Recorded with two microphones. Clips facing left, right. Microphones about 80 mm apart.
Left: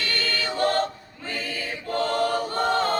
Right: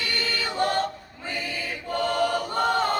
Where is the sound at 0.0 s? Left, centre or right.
Centre.